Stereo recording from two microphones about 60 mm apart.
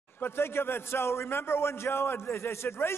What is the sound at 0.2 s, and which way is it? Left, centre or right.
A man's voice, left.